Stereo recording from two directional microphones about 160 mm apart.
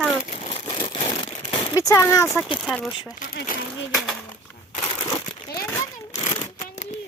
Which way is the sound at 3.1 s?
55° left (ahead or behind).